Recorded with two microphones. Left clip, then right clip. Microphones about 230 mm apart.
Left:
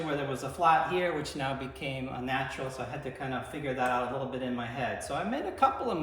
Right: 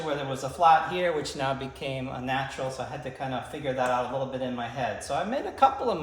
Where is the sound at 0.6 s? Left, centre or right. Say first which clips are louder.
Right 4 dB; centre.